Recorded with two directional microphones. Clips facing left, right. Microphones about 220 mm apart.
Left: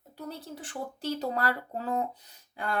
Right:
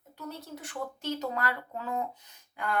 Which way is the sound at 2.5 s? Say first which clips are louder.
Even; 30° left (ahead or behind).